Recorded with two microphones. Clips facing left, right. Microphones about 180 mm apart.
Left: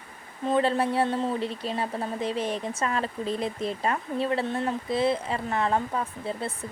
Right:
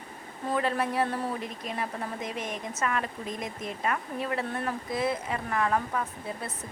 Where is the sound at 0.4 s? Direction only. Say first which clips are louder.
Left 5 dB; 25° left (ahead or behind).